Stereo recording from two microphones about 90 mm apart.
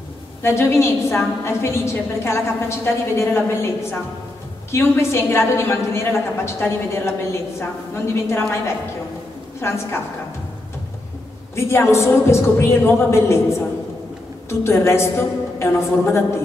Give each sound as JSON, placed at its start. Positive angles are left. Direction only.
{"t": 0.4, "sound": "a woman's voice", "side_deg": 30}
{"t": 11.5, "sound": "a woman's voice", "side_deg": 30}